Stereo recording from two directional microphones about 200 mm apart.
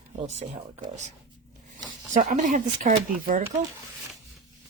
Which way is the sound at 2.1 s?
40° right (ahead or behind).